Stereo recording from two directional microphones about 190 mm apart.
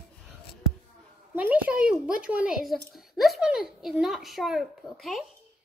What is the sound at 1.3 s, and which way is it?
Speech, 10° right (ahead or behind).